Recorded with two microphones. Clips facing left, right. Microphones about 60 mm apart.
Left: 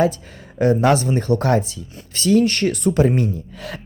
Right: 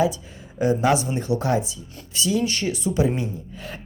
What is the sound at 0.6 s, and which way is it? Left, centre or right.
Speech, left.